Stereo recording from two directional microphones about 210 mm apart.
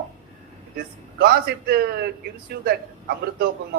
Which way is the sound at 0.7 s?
45° right (ahead or behind).